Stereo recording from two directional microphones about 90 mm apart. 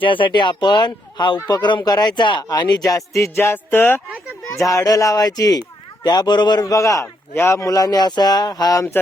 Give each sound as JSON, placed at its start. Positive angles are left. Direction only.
{"t": 0.0, "sound": "speech", "side_deg": 65}
{"t": 4.5, "sound": "speech", "side_deg": 40}